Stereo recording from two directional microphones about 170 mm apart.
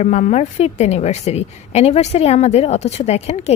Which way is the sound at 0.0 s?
40° left (ahead or behind).